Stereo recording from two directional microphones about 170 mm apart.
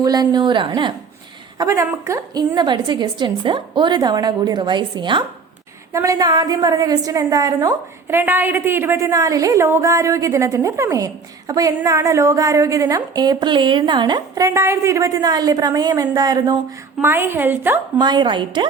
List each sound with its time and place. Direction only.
0.0 s a woman's voice: 20° right (ahead or behind)
17.0 s a woman's voice: 10° right (ahead or behind)
18.0 s a woman's voice: 25° right (ahead or behind)